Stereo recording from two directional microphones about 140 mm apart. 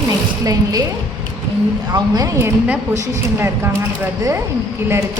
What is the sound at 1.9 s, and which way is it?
A woman's voice, 25° right (ahead or behind).